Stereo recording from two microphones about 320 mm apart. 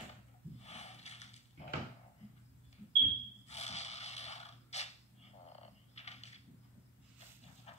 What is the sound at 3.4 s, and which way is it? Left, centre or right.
Snort, left.